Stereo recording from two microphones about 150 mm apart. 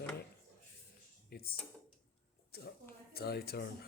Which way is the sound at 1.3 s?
90° left.